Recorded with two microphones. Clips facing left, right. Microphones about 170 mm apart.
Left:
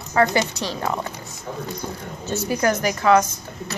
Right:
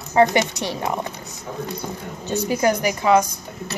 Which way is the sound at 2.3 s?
15° right (ahead or behind).